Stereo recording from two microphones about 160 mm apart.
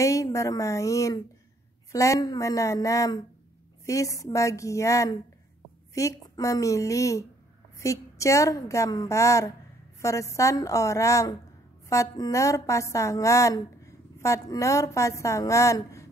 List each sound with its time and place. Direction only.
0.0 s a woman's voice: 20° left (ahead or behind)